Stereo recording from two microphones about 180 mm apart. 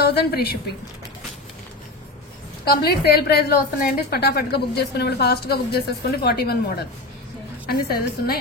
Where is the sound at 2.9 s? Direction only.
60° left (ahead or behind).